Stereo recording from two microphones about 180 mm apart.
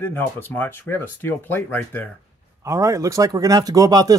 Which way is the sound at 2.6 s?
15° right (ahead or behind).